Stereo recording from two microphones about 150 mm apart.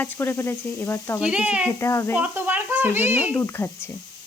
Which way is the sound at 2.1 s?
10° right (ahead or behind).